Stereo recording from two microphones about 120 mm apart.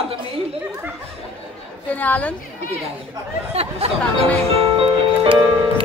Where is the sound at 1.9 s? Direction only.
15° left (ahead or behind).